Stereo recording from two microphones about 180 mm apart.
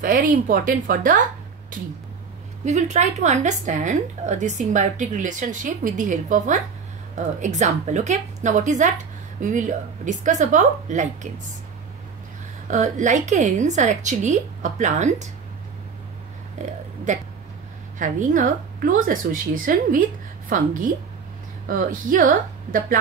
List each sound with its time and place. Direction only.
0.0 s a woman's voice: 50° right (ahead or behind)
2.6 s a woman's voice: 40° right (ahead or behind)
12.6 s a woman's voice: 45° right (ahead or behind)
16.6 s speech: 40° right (ahead or behind)
17.9 s a woman's voice: 45° right (ahead or behind)